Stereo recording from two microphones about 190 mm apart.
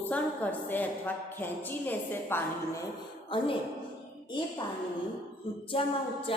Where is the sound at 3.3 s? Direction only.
25° left (ahead or behind).